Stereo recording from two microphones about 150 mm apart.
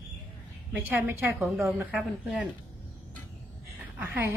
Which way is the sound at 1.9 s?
5° right (ahead or behind).